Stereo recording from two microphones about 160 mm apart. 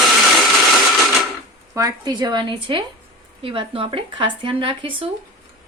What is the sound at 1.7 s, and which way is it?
A woman's voice, 20° right (ahead or behind).